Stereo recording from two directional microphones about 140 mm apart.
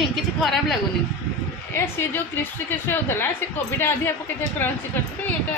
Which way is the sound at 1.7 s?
15° left (ahead or behind).